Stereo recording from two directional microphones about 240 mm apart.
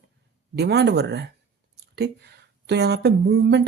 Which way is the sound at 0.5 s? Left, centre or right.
Right.